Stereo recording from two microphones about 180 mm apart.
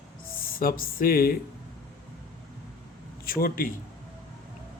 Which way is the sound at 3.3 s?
55° left (ahead or behind).